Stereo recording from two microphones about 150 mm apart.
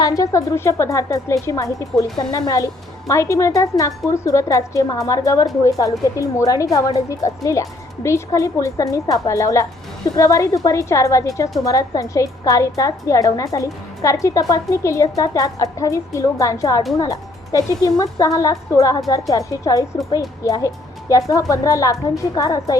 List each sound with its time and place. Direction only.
0.0 s a woman's voice: 25° left (ahead or behind)